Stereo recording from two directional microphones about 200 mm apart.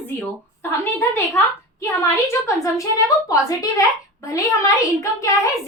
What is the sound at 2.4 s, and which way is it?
A woman's voice, 15° left (ahead or behind).